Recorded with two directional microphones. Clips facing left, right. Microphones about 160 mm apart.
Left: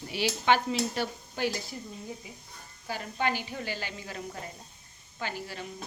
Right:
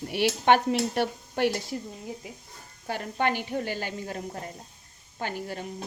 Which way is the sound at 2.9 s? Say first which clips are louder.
Right 3 dB; 60° right (ahead or behind).